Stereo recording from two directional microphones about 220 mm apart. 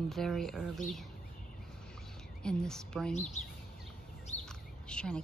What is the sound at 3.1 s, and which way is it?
Speech, 30° left (ahead or behind).